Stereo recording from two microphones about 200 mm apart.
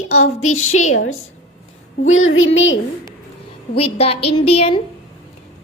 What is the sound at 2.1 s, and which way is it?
Speech, 90° left.